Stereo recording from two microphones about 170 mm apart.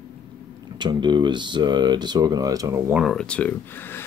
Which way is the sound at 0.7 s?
25° right (ahead or behind).